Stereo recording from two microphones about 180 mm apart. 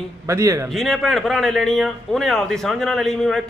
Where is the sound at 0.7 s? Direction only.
Centre (ahead or behind).